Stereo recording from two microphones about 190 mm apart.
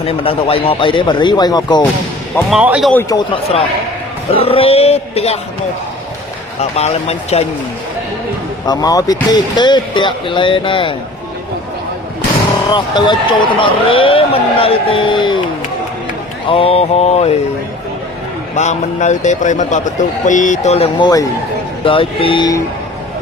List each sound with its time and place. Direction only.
0.0 s speech: 30° left (ahead or behind)
2.5 s speech: 5° right (ahead or behind)
2.9 s a man's voice: 15° left (ahead or behind)
4.4 s a man's voice: 30° left (ahead or behind)
6.6 s a man's voice: 35° left (ahead or behind)
8.6 s speech: 20° left (ahead or behind)
12.6 s speech: 25° left (ahead or behind)
16.5 s a man's voice: 30° left (ahead or behind)
18.5 s a man's voice: 40° left (ahead or behind); by 22.6 s 20° left (ahead or behind)